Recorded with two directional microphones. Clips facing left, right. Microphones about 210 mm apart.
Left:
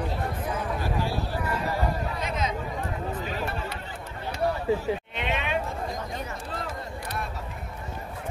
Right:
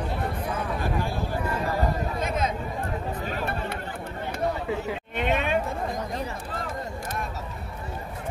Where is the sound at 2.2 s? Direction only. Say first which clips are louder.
Right 3 dB; 50° right (ahead or behind).